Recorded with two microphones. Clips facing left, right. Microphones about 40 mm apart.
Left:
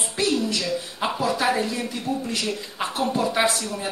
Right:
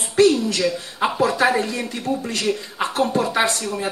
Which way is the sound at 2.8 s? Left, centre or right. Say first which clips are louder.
Right 3 dB; centre.